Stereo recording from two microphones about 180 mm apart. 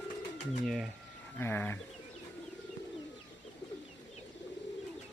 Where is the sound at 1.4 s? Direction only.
10° left (ahead or behind).